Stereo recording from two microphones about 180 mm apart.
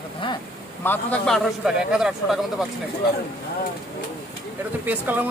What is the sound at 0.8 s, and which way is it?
A man's voice, 10° left (ahead or behind).